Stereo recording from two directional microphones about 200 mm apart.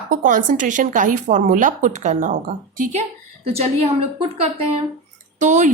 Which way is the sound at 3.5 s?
30° right (ahead or behind).